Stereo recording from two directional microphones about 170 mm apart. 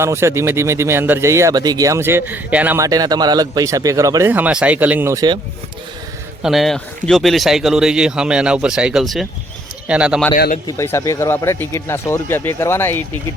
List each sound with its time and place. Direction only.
0.0 s speech: 15° right (ahead or behind)
2.8 s a man's voice: 20° right (ahead or behind)
6.4 s speech: centre (ahead or behind)
10.3 s speech: 60° left (ahead or behind)
10.8 s speech: 15° left (ahead or behind)